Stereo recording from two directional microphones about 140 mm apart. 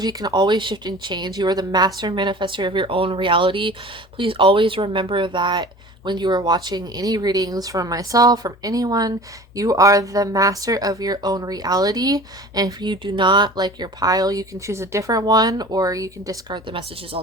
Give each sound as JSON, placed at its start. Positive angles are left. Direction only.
{"t": 0.0, "sound": "speech", "side_deg": -30}